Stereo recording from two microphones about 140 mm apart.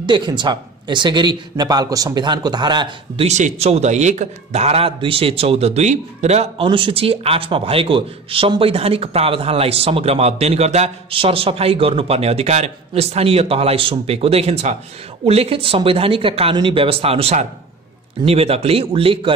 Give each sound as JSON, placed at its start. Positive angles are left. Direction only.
{"t": 0.0, "sound": "a man's voice", "side_deg": -35}
{"t": 3.3, "sound": "a man's voice", "side_deg": -55}